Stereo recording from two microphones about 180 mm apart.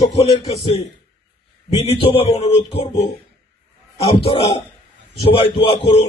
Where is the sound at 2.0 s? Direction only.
35° left (ahead or behind).